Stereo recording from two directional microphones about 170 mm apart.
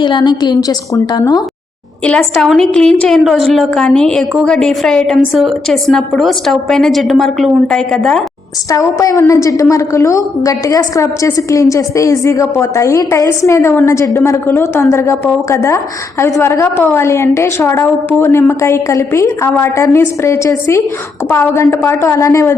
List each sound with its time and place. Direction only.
0.0 s a woman's voice: 25° left (ahead or behind)
2.0 s a woman's voice: 5° left (ahead or behind)
8.7 s a woman's voice: 20° left (ahead or behind)